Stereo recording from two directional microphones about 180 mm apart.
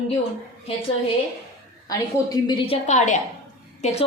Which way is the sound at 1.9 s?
20° left (ahead or behind).